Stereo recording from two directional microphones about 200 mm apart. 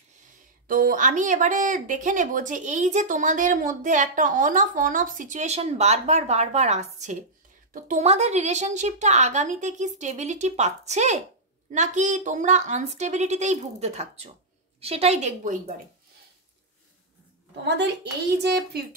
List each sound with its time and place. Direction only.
0.7 s speech: 45° right (ahead or behind)
17.6 s a child's voice: 55° right (ahead or behind)